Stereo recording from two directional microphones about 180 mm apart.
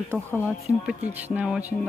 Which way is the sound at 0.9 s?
5° right (ahead or behind).